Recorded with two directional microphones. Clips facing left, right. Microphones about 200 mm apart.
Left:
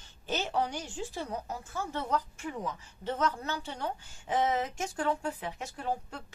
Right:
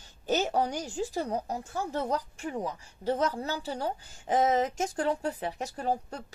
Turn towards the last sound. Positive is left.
turn(degrees=-40)  # may be behind; listen again after turning